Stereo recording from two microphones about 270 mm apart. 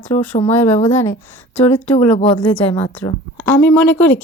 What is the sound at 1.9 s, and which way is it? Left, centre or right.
Speech, left.